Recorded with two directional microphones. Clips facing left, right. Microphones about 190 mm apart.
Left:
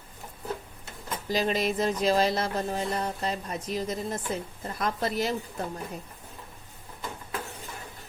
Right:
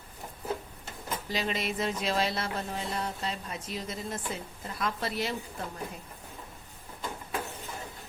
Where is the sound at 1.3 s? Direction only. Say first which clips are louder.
Left 7 dB; 40° left (ahead or behind).